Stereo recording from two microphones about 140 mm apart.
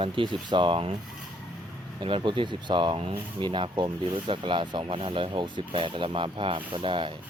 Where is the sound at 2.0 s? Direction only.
35° right (ahead or behind).